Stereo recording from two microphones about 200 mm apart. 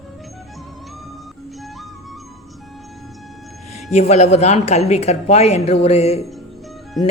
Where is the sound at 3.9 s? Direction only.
35° left (ahead or behind).